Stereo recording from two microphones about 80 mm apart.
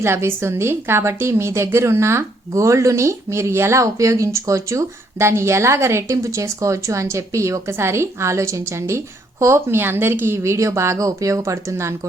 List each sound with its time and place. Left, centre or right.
0.0 s a woman's voice: right